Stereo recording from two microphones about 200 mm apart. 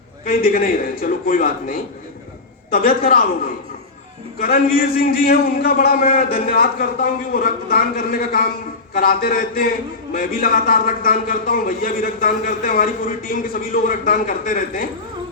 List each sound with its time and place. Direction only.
0.3 s a man's voice: 45° left (ahead or behind)
4.4 s a man's voice: 50° left (ahead or behind)